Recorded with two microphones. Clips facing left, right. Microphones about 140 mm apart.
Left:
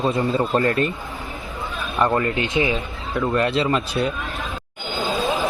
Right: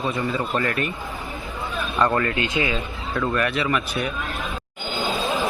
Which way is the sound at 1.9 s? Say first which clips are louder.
Left 2 dB; 20° left (ahead or behind).